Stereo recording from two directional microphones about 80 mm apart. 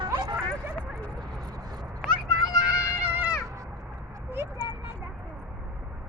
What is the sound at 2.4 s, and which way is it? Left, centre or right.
Run, left.